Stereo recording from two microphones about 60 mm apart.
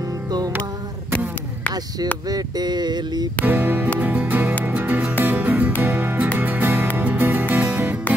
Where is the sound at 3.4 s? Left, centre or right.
Right.